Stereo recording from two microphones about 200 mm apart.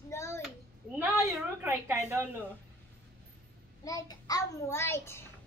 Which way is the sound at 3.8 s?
15° left (ahead or behind).